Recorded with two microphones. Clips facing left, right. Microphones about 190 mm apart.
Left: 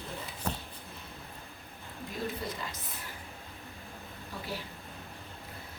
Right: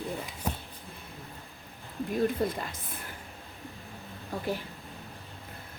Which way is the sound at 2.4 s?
50° right (ahead or behind).